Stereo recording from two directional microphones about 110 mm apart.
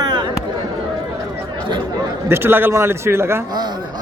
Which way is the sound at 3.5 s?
40° right (ahead or behind).